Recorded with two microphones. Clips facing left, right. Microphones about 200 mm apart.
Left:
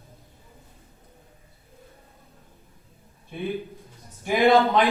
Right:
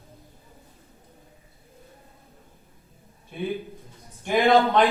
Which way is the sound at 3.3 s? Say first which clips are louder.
Even; centre (ahead or behind).